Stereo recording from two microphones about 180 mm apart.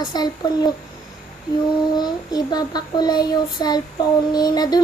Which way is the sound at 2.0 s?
25° left (ahead or behind).